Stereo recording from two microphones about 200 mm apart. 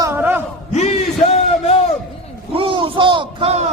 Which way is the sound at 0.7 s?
35° left (ahead or behind).